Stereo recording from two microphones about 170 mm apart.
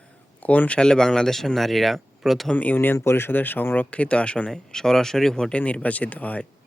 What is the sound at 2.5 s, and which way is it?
A man's voice, 10° left (ahead or behind).